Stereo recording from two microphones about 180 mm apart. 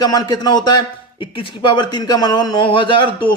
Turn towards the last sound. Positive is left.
turn(degrees=25)  # may be behind; listen again after turning